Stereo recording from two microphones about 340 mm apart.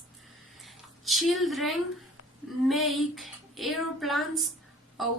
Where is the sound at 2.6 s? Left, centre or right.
Centre.